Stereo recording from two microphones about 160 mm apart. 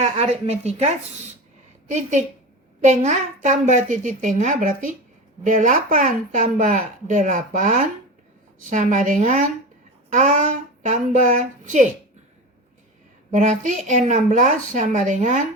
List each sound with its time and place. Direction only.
0.0 s speech: 45° right (ahead or behind)
13.3 s speech: 50° right (ahead or behind)